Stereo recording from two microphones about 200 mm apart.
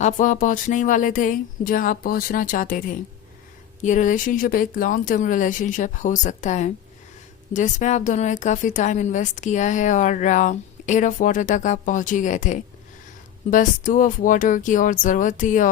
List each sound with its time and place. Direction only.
0.0 s speech: 40° left (ahead or behind)